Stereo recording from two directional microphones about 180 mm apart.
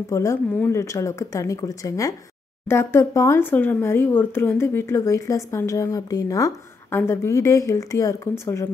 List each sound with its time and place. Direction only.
0.1 s speech: 15° left (ahead or behind)